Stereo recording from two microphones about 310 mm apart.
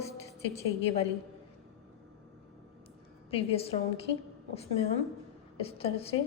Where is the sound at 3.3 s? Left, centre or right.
Centre.